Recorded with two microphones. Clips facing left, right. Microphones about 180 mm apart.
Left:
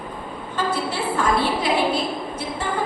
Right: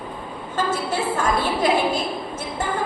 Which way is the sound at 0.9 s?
45° right (ahead or behind).